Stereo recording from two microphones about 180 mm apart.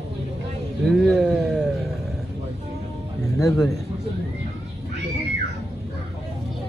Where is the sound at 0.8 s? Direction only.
Centre (ahead or behind).